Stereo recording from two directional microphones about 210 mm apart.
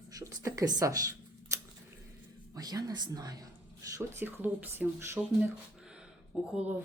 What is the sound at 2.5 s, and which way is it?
Speech, 20° right (ahead or behind).